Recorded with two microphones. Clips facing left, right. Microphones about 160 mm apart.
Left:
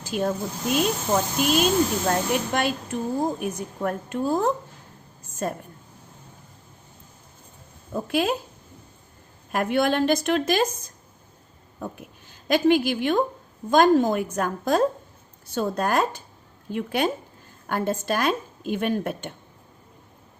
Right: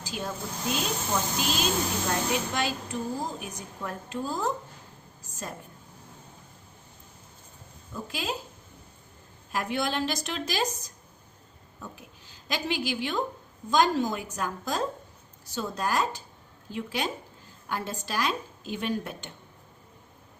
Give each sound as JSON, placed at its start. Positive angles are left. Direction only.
{"t": 0.0, "sound": "a woman's voice", "side_deg": 55}
{"t": 7.9, "sound": "a woman's voice", "side_deg": 60}
{"t": 9.5, "sound": "a woman's voice", "side_deg": 55}
{"t": 11.8, "sound": "a woman's voice", "side_deg": 55}